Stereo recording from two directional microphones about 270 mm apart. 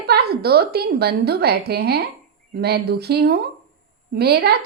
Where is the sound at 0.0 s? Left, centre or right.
Right.